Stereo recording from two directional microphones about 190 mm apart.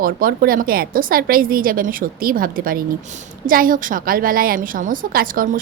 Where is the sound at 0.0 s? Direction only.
50° right (ahead or behind).